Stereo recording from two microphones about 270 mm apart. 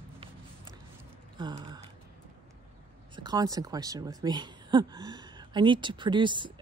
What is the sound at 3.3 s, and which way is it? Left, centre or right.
Speech, centre.